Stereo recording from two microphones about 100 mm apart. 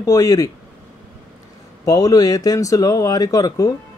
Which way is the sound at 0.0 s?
35° left (ahead or behind).